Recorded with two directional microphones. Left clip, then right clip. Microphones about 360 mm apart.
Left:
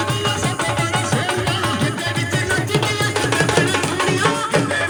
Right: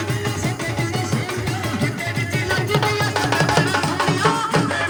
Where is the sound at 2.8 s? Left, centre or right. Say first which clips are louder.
Even; right.